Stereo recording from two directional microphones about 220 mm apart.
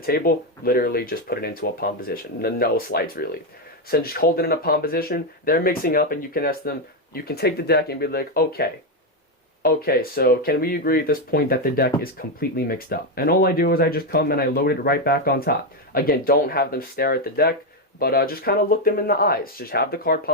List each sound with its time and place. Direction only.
0.0 s speech: 45° left (ahead or behind)